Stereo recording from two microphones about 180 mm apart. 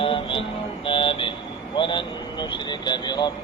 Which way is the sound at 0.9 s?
30° left (ahead or behind).